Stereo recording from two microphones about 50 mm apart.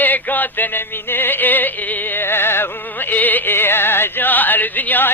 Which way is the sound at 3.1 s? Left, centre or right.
Left.